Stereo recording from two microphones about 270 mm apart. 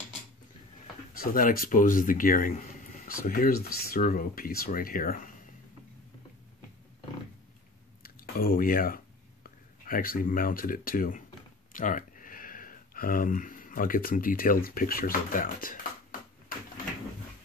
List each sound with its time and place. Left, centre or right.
1.2 s speech: left
8.0 s speech: left
11.7 s a sound: left